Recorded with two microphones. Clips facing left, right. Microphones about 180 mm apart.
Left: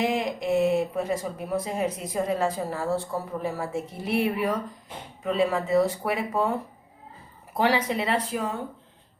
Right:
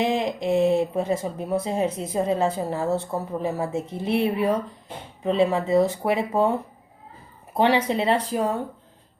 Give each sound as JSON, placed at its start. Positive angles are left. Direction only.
{"t": 0.0, "sound": "speech", "side_deg": -25}
{"t": 7.5, "sound": "speech", "side_deg": -25}